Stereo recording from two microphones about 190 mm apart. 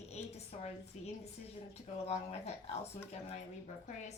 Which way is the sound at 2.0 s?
35° left (ahead or behind).